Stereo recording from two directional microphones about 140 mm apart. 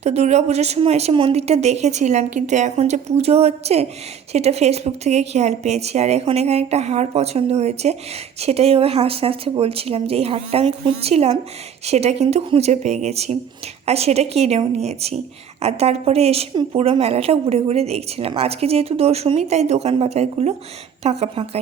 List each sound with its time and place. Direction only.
0.0 s speech: 50° right (ahead or behind)